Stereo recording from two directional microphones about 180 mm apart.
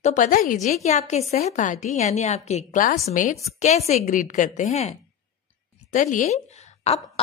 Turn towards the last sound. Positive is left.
turn(degrees=35)  # may be behind; listen again after turning